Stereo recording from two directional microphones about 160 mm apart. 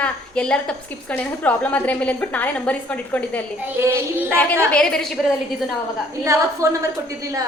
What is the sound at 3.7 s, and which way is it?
Speech, 15° right (ahead or behind).